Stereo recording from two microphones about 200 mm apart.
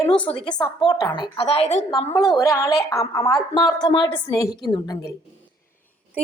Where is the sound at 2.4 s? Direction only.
15° left (ahead or behind).